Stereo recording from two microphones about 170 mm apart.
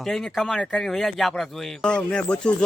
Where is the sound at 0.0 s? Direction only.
Centre (ahead or behind).